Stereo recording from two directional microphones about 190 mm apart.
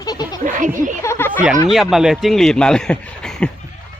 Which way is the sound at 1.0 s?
15° left (ahead or behind).